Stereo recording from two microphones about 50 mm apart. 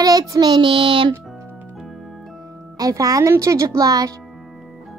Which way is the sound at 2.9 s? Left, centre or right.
Right.